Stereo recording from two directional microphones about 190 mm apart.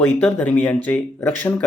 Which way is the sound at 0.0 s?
5° left (ahead or behind).